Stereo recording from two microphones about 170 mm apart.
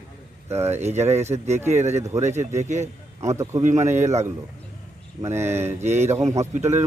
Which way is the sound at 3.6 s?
45° right (ahead or behind).